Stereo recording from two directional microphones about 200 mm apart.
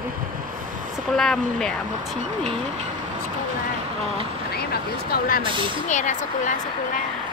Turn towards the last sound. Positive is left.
turn(degrees=40)  # may be behind; listen again after turning